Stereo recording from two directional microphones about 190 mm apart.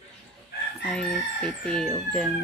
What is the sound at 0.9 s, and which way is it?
Speech, 5° left (ahead or behind).